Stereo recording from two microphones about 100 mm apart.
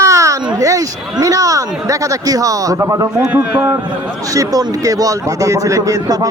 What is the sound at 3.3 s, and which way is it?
Speech, 15° right (ahead or behind).